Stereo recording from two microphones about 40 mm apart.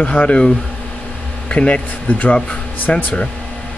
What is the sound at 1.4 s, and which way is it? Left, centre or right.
Speech, left.